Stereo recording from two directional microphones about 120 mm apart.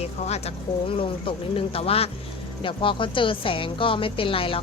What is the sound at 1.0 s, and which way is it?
A woman's voice, 50° left (ahead or behind).